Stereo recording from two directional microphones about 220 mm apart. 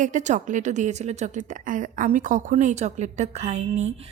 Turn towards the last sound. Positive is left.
turn(degrees=-30)  # may be behind; listen again after turning